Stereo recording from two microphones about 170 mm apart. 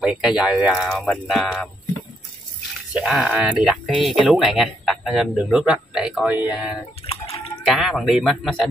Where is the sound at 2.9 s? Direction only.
5° right (ahead or behind).